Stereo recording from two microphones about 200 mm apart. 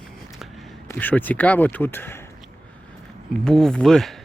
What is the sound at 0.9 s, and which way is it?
Speech, 10° left (ahead or behind).